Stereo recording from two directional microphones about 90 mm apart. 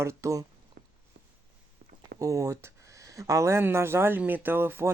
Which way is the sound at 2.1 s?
40° right (ahead or behind).